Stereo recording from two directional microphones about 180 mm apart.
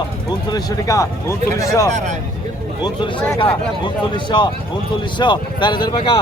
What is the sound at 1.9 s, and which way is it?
Speech, 45° right (ahead or behind).